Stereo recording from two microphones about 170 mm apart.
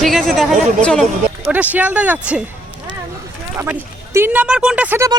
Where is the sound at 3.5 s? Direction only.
15° right (ahead or behind).